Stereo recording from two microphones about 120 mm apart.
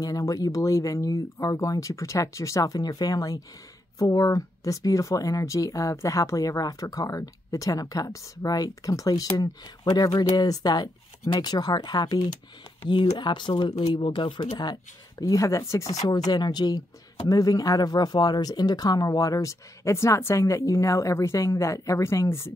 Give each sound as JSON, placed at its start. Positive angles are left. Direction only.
{"t": 0.0, "sound": "speech", "side_deg": 30}
{"t": 14.6, "sound": "speech", "side_deg": 35}